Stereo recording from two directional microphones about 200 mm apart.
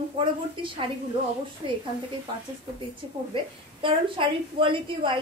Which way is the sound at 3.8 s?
25° right (ahead or behind).